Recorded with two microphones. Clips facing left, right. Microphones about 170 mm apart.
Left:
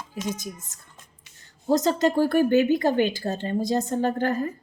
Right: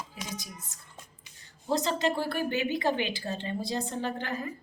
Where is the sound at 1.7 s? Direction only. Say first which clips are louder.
Left 7 dB; 45° left (ahead or behind).